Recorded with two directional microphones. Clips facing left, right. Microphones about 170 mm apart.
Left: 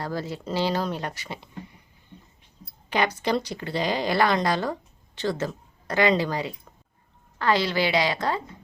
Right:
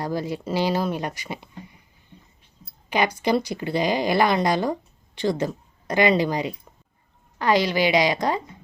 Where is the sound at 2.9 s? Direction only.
10° right (ahead or behind).